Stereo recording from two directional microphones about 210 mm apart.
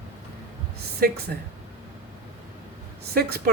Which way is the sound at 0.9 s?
45° right (ahead or behind).